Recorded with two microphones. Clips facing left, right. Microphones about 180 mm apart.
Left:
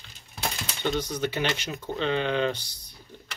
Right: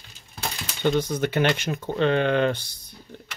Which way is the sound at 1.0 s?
55° right (ahead or behind).